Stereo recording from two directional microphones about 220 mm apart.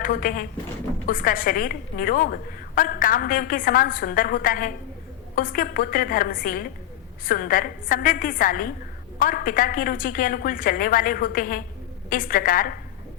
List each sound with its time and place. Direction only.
0.0 s a woman's voice: 40° left (ahead or behind)